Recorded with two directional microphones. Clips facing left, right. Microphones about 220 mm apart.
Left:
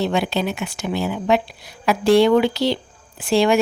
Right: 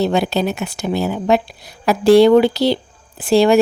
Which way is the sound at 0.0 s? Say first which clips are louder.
Right 4 dB; 40° right (ahead or behind).